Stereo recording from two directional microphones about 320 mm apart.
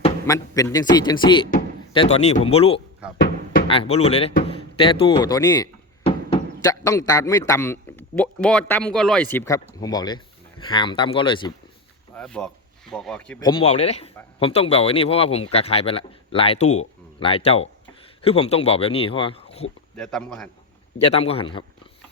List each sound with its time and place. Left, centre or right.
0.0 s speech: centre
12.1 s speech: centre
13.7 s speech: centre
20.0 s a man's voice: centre
21.1 s speech: centre